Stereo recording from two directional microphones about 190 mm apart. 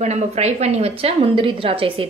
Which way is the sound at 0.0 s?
35° right (ahead or behind).